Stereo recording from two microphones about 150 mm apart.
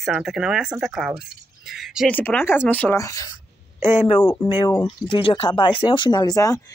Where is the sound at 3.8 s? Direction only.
15° right (ahead or behind).